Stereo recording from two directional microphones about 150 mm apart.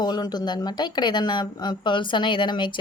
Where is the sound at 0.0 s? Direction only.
30° left (ahead or behind).